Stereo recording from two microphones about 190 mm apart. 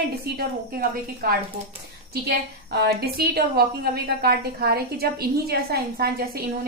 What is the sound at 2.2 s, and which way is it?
A woman's voice, 55° right (ahead or behind).